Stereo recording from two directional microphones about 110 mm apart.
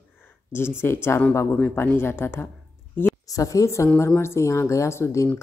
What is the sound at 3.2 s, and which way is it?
Speech, 30° left (ahead or behind).